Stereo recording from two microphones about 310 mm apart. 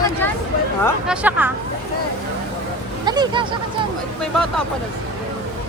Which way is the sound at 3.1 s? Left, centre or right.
Centre.